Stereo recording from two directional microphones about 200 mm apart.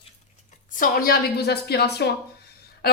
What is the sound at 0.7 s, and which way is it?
A woman's voice, 45° left (ahead or behind).